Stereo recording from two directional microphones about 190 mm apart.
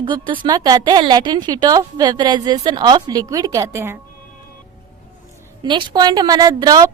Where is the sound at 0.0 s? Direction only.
25° right (ahead or behind).